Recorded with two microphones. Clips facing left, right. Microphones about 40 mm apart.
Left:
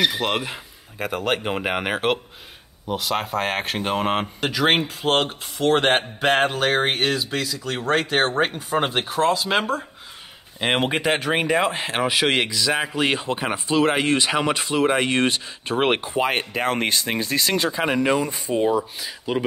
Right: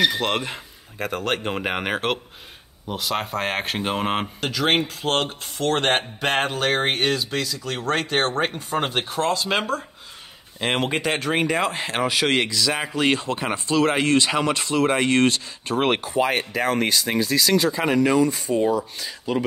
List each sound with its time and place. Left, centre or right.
0.0 s speech: centre
4.4 s speech: centre; by 16.7 s left
16.7 s speech: left
17.6 s speech: centre